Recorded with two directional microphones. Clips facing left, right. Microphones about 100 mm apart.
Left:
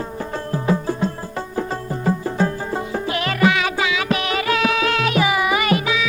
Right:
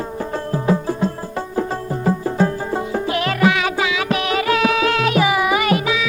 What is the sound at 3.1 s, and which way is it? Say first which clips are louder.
Music: right 1 dB; 10° right (ahead or behind).